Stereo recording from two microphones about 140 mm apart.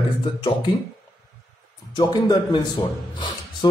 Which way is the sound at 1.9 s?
30° left (ahead or behind).